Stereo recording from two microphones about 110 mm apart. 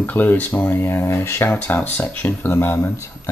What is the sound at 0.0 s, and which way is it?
Speech, 15° left (ahead or behind).